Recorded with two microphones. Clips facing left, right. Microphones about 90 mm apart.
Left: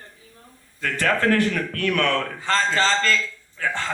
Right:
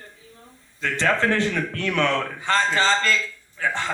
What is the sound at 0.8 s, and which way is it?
A man's voice, 25° right (ahead or behind).